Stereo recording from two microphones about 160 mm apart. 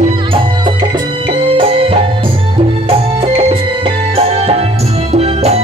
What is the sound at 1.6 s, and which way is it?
Music, 35° right (ahead or behind).